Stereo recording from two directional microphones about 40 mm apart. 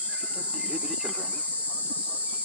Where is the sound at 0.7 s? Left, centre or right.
Centre.